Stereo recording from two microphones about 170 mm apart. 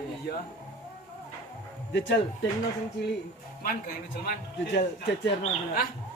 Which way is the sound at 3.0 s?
80° left.